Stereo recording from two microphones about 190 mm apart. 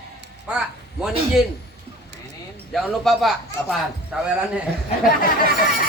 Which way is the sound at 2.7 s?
Centre (ahead or behind).